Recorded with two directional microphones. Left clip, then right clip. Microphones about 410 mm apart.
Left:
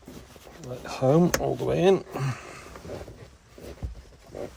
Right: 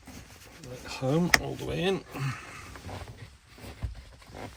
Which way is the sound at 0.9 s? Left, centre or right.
Centre.